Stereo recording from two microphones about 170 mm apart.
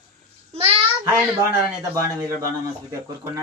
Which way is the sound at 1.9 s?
15° right (ahead or behind).